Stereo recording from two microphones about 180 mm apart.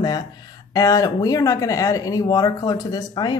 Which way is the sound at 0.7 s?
20° left (ahead or behind).